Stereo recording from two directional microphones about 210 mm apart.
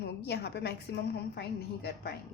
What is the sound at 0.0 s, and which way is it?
A woman's voice, 50° left (ahead or behind).